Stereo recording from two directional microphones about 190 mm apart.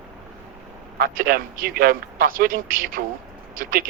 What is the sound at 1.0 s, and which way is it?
A man's voice, 50° right (ahead or behind).